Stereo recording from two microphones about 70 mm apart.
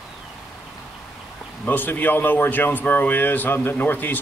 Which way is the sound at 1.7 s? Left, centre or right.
Left.